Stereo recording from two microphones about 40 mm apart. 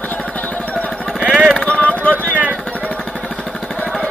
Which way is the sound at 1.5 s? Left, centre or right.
Left.